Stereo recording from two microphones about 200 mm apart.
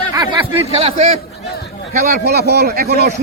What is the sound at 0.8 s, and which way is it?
Speech, 30° right (ahead or behind).